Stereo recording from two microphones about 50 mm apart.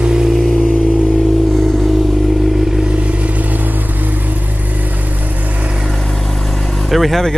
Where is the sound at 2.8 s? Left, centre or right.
Right.